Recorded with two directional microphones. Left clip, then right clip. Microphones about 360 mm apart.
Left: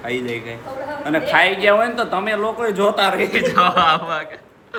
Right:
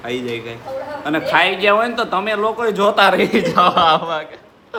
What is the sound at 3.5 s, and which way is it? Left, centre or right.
Speech, centre.